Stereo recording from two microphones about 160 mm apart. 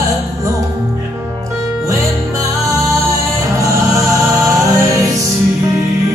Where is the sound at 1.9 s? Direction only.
20° right (ahead or behind).